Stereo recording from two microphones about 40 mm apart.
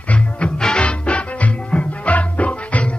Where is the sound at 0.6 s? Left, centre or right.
Left.